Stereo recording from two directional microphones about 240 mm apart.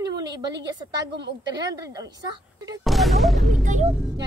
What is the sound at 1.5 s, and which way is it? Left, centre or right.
A woman's voice, centre.